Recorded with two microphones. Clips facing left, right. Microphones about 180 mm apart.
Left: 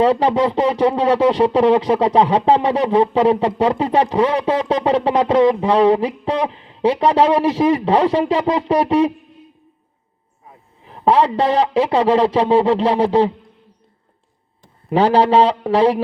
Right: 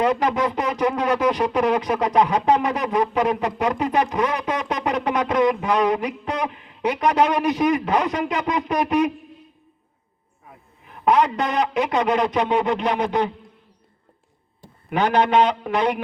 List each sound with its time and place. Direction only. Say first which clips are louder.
0.0 s speech: left 5 dB; 30° left (ahead or behind)
10.8 s a man's voice: left 3 dB; 30° left (ahead or behind)
14.8 s a man's voice: left 5 dB; 30° left (ahead or behind)